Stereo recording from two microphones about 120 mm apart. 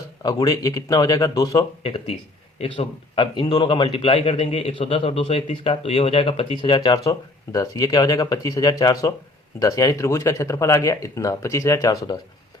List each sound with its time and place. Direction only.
0.2 s a man's voice: 30° left (ahead or behind)
1.8 s a man's voice: 45° left (ahead or behind); by 12.1 s 30° left (ahead or behind)